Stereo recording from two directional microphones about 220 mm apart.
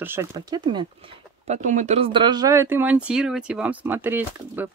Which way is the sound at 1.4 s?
35° right (ahead or behind).